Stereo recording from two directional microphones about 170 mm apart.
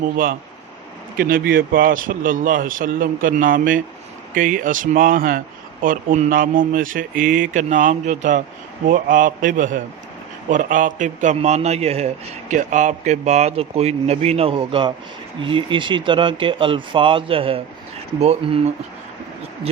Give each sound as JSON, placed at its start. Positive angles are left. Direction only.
{"t": 1.2, "sound": "a man's voice", "side_deg": -60}